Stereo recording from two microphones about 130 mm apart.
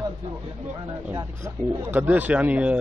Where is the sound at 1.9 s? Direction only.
15° right (ahead or behind).